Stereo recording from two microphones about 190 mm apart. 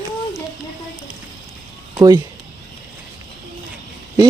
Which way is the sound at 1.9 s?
20° right (ahead or behind).